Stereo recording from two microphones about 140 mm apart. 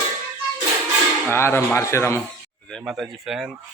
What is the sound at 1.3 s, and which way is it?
Speech, 15° left (ahead or behind).